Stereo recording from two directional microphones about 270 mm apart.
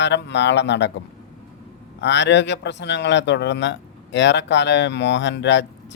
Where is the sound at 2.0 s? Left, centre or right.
Left.